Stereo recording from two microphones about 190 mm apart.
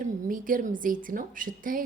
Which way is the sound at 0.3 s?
45° right (ahead or behind).